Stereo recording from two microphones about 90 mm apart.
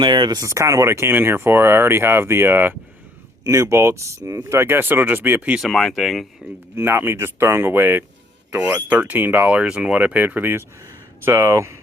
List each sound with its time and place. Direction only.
0.0 s speech: 60° right (ahead or behind)
0.3 s speech: 35° right (ahead or behind)
3.4 s speech: 35° right (ahead or behind); by 5.5 s 20° right (ahead or behind)
5.5 s speech: centre (ahead or behind)
6.7 s speech: 25° right (ahead or behind)